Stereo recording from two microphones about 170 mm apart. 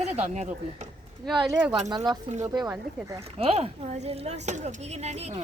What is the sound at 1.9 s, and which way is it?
Speech, 20° right (ahead or behind).